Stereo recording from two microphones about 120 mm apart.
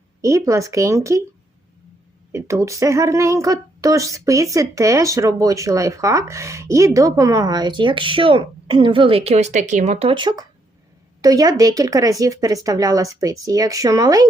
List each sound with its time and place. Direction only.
0.2 s speech: 25° right (ahead or behind)
2.3 s speech: 25° right (ahead or behind); by 10.1 s 70° right (ahead or behind)
10.1 s speech: 40° right (ahead or behind)